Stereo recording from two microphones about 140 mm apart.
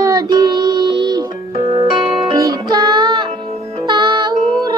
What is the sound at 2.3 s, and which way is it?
Music, 25° right (ahead or behind).